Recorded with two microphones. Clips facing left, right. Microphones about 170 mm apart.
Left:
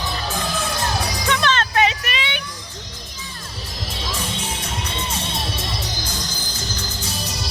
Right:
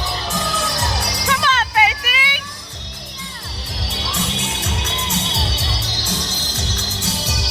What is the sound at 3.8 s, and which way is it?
Music, 75° right (ahead or behind).